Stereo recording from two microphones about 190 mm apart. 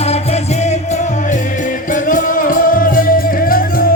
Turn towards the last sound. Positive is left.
turn(degrees=50)  # may be behind; listen again after turning